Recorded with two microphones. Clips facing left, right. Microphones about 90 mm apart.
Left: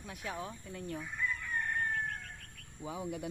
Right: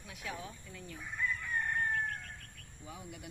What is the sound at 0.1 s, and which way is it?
Speech, 40° left (ahead or behind).